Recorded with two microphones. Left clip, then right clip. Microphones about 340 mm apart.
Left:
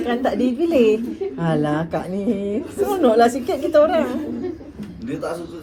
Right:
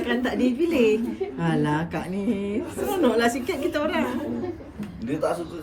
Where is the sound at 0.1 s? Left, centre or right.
Centre.